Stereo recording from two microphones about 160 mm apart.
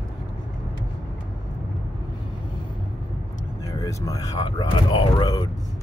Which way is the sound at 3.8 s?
20° left (ahead or behind).